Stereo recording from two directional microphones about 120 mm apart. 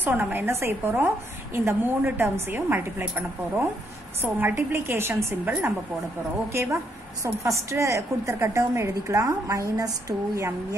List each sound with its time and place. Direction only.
0.0 s a woman's voice: 15° right (ahead or behind)